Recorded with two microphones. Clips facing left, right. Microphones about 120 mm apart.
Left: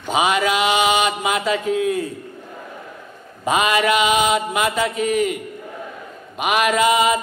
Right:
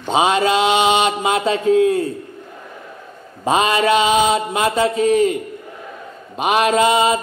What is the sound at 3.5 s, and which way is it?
A man's voice, 30° right (ahead or behind).